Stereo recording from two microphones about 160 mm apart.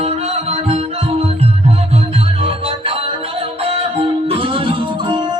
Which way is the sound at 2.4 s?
35° right (ahead or behind).